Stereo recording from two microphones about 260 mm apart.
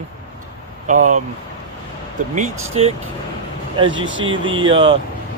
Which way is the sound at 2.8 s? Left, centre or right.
Right.